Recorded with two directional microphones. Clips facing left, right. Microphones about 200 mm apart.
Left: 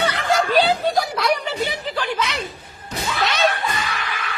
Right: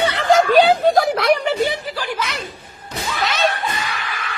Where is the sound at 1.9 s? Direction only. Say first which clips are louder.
Left 1 dB; 10° right (ahead or behind).